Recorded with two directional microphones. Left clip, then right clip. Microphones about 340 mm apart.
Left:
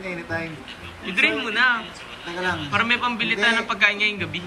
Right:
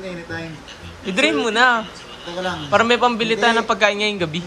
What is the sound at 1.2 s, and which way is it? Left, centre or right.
A man's voice, centre.